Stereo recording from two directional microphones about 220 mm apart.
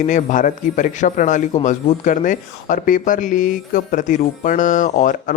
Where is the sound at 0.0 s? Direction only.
35° left (ahead or behind).